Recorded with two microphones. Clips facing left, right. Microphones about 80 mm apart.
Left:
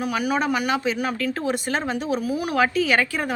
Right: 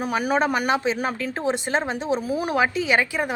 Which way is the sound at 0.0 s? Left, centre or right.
Right.